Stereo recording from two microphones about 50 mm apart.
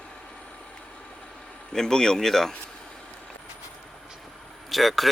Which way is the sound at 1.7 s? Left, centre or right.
Centre.